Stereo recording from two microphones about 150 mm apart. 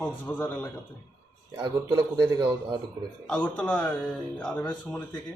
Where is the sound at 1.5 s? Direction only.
30° right (ahead or behind).